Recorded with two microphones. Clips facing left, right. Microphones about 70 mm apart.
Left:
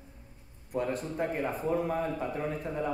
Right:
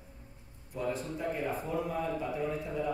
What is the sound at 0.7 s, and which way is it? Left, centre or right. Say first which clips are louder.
A man's voice: left 3 dB; left.